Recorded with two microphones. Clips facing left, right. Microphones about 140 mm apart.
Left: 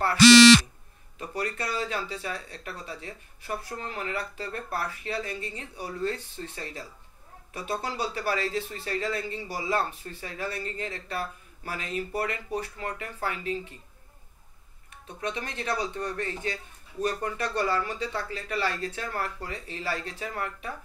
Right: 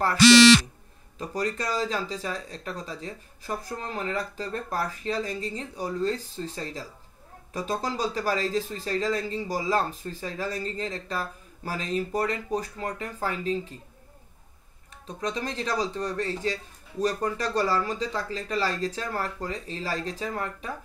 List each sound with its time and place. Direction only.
1.1 s speech: 35° right (ahead or behind)
15.1 s speech: 35° right (ahead or behind)